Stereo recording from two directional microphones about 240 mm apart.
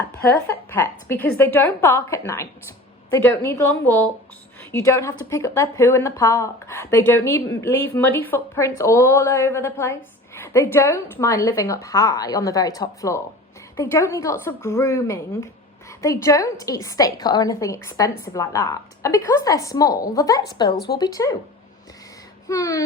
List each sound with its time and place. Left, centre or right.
0.3 s a woman's voice: centre
20.7 s speech: left
21.0 s a woman's voice: centre
22.4 s a woman's voice: centre